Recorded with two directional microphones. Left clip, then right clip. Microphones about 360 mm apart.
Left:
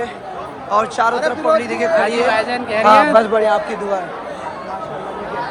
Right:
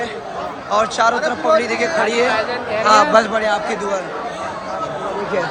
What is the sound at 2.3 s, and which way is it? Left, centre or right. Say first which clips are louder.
Speech: left 2 dB; left.